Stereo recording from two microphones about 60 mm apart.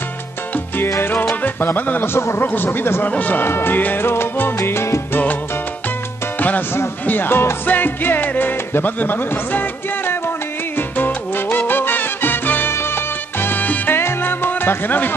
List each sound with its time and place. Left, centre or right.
0.9 s salsa music: left
1.2 s music: left
3.1 s speech: left
3.5 s salsa music: left
5.1 s salsa music: left
6.7 s music: left
12.7 s salsa music: left